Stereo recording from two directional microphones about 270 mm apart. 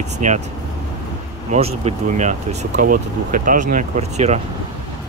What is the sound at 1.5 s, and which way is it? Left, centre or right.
Speech, right.